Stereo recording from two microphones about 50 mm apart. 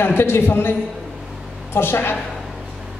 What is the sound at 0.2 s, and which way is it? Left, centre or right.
A man's voice, left.